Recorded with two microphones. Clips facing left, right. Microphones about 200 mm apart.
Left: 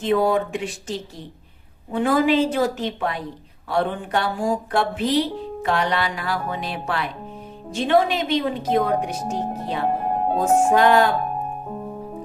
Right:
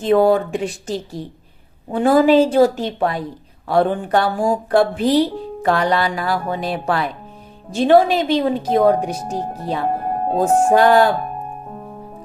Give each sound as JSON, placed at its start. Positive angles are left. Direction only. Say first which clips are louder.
{"t": 0.0, "sound": "speech", "louder": "right 5 dB", "side_deg": -35}